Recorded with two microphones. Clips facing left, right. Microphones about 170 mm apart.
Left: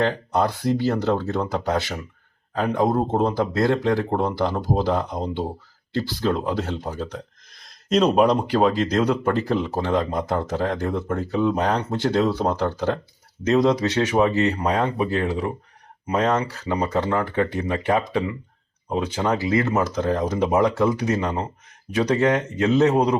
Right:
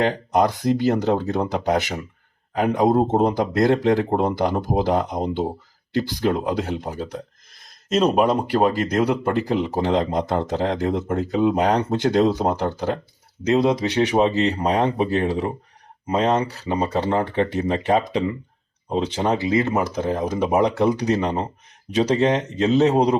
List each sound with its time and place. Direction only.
0.0 s speech: 15° right (ahead or behind)